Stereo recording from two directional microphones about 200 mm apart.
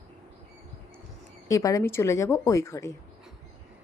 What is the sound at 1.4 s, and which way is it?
A woman's voice, 15° left (ahead or behind).